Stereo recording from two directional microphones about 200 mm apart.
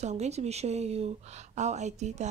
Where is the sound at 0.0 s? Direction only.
35° right (ahead or behind).